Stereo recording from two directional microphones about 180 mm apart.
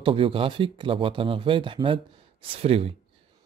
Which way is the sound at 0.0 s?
30° right (ahead or behind).